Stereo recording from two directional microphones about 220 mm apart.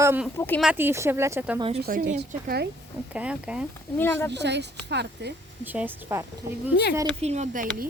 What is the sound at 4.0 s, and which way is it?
Speech, 10° left (ahead or behind).